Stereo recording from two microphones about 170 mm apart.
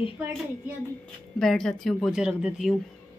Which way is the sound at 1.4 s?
5° left (ahead or behind).